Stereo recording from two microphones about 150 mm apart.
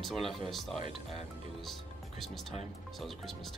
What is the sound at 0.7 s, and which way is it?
Speech, 35° right (ahead or behind).